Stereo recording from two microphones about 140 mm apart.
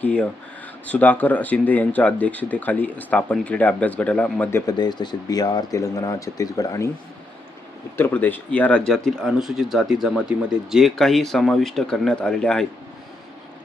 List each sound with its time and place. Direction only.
0.0 s speech: 10° left (ahead or behind)
4.6 s speech: 30° left (ahead or behind)
7.9 s speech: 15° left (ahead or behind)